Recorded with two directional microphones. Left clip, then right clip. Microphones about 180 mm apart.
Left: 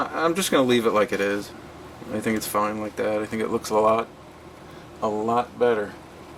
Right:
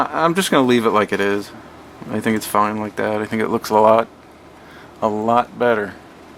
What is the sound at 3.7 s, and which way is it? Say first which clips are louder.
Speech: right 7 dB; 55° right (ahead or behind).